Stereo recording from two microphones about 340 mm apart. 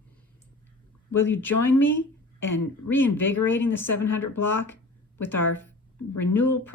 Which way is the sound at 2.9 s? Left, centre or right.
Centre.